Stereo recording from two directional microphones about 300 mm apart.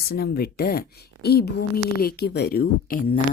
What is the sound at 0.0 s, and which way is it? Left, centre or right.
A woman's voice, left.